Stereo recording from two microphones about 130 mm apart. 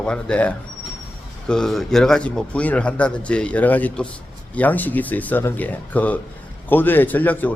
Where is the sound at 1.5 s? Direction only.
5° left (ahead or behind).